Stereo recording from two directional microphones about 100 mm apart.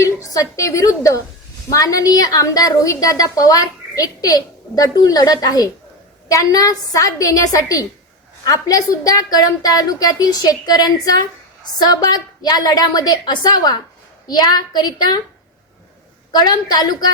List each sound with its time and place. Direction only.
0.0 s a woman's voice: 35° left (ahead or behind)
16.3 s a woman's voice: 45° left (ahead or behind)